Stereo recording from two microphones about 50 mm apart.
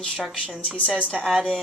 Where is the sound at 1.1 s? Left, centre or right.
Centre.